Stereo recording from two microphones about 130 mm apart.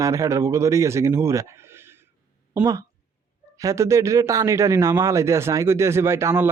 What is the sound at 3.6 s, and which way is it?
Speech, 25° right (ahead or behind).